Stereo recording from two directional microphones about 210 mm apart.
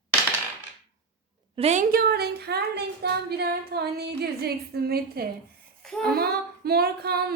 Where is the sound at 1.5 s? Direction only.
30° right (ahead or behind).